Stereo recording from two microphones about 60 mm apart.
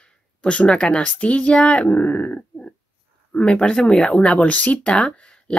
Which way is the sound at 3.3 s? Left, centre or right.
Centre.